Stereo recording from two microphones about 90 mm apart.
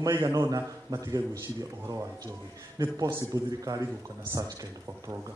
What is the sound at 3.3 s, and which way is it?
Speech, 40° right (ahead or behind).